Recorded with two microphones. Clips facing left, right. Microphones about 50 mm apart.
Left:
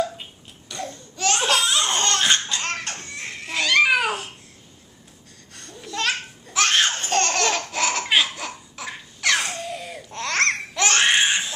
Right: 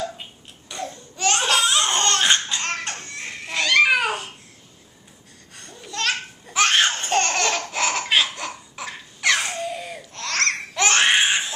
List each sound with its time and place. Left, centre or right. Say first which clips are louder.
0.7 s laughter: right 1 dB; centre
2.6 s crying: right 1 dB; centre
5.5 s babbling: left 2 dB; centre
6.4 s laughter: right 2 dB; centre
10.1 s babbling: left 2 dB; left
10.7 s a sound: right 4 dB; centre